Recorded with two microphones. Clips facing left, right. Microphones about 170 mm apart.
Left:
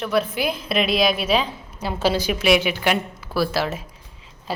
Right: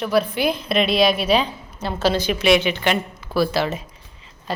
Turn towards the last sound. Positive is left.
turn(degrees=5)  # may be behind; listen again after turning